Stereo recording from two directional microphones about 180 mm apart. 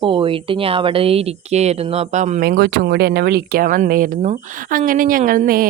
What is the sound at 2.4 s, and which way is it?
A woman's voice, 60° right (ahead or behind).